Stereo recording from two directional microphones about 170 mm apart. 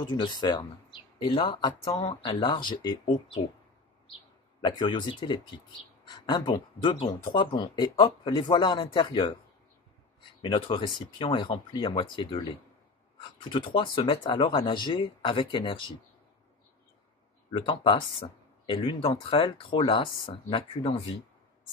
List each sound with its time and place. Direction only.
0.0 s speech: 25° left (ahead or behind)
4.6 s speech: 25° left (ahead or behind)
10.4 s speech: 30° left (ahead or behind)
17.5 s speech: 30° left (ahead or behind)